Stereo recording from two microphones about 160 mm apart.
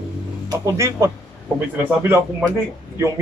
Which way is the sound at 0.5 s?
20° right (ahead or behind).